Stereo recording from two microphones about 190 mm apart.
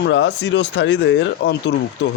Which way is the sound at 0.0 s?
65° left (ahead or behind).